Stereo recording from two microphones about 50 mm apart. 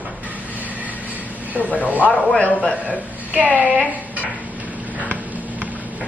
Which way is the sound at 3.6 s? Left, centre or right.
Left.